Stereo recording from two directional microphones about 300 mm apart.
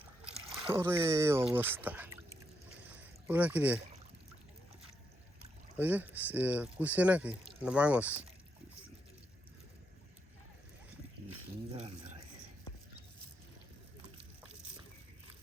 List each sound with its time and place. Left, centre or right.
0.5 s speech: centre
2.9 s boat: centre
5.7 s speech: centre
11.7 s speech: centre